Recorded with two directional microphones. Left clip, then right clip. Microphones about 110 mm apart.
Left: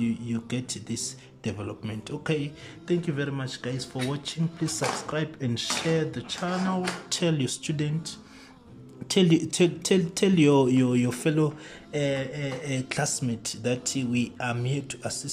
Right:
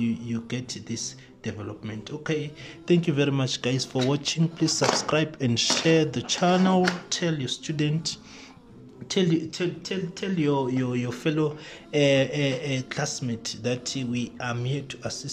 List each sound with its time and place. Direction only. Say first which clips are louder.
0.0 s speech: right 1 dB; centre (ahead or behind)
2.9 s speech: right 5 dB; 15° right (ahead or behind)
7.1 s speech: even; 10° left (ahead or behind)
9.1 s speech: left 2 dB; 10° left (ahead or behind)
9.4 s speech: left 5 dB; 30° left (ahead or behind); by 11.5 s 10° left (ahead or behind)
11.9 s speech: right 7 dB; 15° right (ahead or behind)
12.9 s speech: left 1 dB; 10° left (ahead or behind)